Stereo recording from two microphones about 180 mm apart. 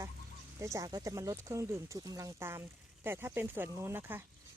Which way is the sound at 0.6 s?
15° right (ahead or behind).